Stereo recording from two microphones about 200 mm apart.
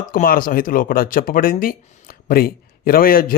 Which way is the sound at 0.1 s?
45° left (ahead or behind).